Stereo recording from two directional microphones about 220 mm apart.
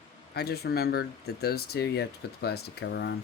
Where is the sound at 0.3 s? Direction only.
45° left (ahead or behind).